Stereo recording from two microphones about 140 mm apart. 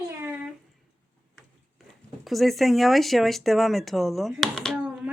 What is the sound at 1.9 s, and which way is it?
Speech, centre (ahead or behind).